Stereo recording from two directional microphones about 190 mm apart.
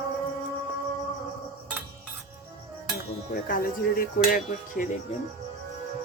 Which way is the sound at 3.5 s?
50° left (ahead or behind).